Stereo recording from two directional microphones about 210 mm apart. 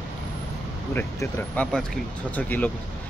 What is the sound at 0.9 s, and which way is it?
Speech, 10° left (ahead or behind).